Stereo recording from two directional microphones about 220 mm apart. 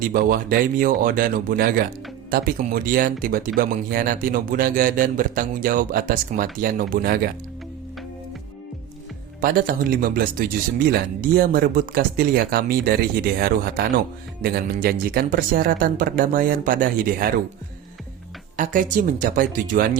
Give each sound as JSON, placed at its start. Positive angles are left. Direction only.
{"t": 0.0, "sound": "speech", "side_deg": -40}
{"t": 9.4, "sound": "speech", "side_deg": -40}
{"t": 18.5, "sound": "speech", "side_deg": -35}